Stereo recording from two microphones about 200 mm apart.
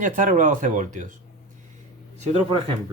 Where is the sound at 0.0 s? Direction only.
40° right (ahead or behind).